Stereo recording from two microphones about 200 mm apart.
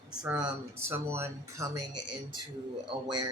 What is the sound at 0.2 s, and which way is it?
Speech, 5° right (ahead or behind).